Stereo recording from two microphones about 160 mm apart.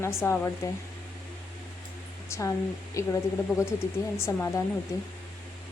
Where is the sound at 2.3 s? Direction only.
20° left (ahead or behind).